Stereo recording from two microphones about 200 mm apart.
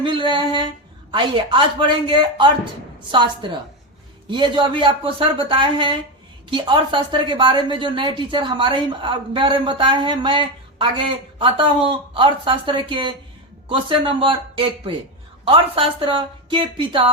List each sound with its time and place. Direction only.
0.0 s a woman's voice: 25° right (ahead or behind)